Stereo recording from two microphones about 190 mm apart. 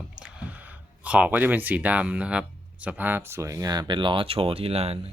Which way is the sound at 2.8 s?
10° right (ahead or behind).